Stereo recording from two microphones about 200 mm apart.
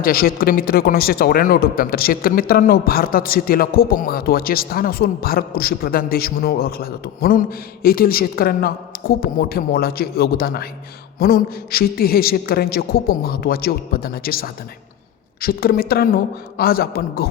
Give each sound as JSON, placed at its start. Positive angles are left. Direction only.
{"t": 0.0, "sound": "speech", "side_deg": 45}